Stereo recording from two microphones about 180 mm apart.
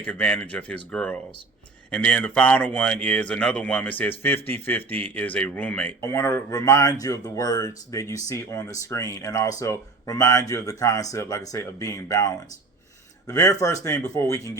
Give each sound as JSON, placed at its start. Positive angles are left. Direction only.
{"t": 0.0, "sound": "speech", "side_deg": 5}